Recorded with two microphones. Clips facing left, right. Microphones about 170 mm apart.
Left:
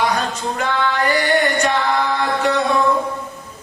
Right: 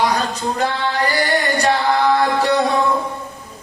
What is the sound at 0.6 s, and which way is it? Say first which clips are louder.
Chant: left 1 dB; 35° right (ahead or behind).